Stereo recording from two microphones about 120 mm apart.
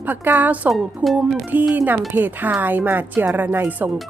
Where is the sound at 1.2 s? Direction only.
15° right (ahead or behind).